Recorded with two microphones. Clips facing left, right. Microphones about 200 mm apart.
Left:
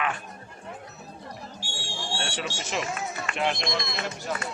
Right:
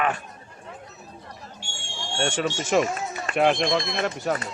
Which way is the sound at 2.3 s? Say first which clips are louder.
Right 9 dB; 50° right (ahead or behind).